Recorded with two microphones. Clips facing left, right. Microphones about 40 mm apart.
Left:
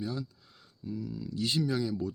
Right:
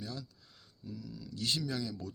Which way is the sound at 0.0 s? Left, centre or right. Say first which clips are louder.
Left 7 dB; centre.